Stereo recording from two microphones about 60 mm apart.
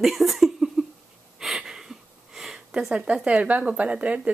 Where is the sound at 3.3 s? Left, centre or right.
Right.